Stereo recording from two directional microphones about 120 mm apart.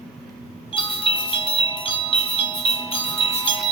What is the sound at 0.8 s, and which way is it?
Music, 45° left (ahead or behind).